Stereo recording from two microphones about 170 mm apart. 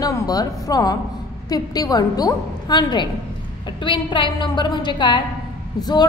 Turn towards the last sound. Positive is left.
turn(degrees=25)  # may be behind; listen again after turning